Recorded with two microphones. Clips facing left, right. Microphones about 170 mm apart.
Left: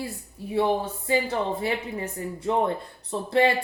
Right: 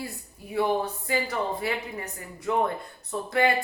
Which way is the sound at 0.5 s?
25° left (ahead or behind).